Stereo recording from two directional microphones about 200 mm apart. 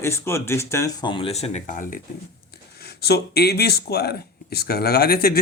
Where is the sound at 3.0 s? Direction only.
55° left (ahead or behind).